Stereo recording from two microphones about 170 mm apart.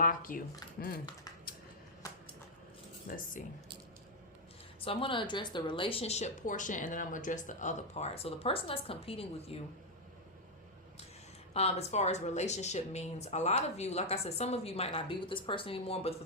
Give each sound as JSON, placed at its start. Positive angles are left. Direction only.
{"t": 0.0, "sound": "speech", "side_deg": 55}
{"t": 3.1, "sound": "speech", "side_deg": 60}
{"t": 4.9, "sound": "speech", "side_deg": 30}
{"t": 11.5, "sound": "speech", "side_deg": 40}